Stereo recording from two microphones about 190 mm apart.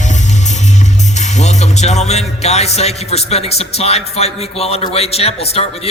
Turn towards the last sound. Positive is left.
turn(degrees=30)  # may be behind; listen again after turning